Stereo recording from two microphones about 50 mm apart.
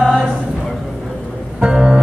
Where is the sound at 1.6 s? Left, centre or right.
Centre.